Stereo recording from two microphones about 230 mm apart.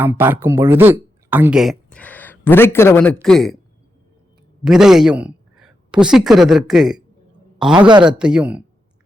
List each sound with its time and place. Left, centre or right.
0.0 s speech: centre
4.6 s speech: centre
7.8 s speech: centre
8.2 s speech: centre